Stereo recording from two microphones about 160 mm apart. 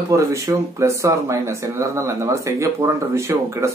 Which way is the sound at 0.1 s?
20° right (ahead or behind).